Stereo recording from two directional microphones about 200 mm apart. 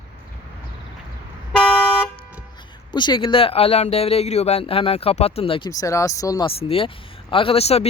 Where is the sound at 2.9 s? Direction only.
20° left (ahead or behind).